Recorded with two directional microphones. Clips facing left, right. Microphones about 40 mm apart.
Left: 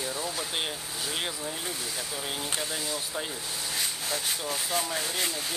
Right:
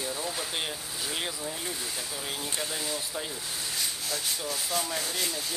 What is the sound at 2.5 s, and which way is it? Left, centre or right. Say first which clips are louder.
Speech: left 1 dB; centre.